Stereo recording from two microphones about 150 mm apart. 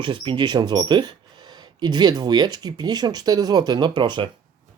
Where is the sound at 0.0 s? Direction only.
35° right (ahead or behind).